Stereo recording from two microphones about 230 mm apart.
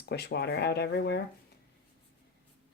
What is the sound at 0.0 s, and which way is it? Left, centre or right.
Speech, left.